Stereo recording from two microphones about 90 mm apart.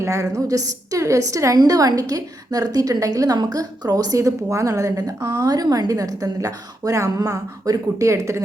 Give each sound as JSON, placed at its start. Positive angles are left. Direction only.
{"t": 0.0, "sound": "a woman's voice", "side_deg": -35}